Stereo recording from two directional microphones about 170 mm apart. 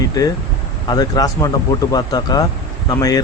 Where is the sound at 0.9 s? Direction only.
25° left (ahead or behind).